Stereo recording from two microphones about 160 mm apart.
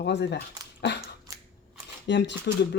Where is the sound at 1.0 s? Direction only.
25° right (ahead or behind).